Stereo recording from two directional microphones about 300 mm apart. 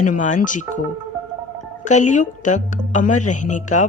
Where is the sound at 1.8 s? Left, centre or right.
Left.